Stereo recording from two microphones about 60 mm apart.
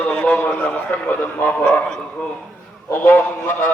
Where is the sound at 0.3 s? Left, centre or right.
Left.